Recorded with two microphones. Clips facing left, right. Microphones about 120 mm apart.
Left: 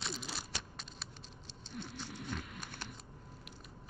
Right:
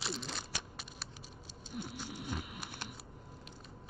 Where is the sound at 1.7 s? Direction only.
10° right (ahead or behind).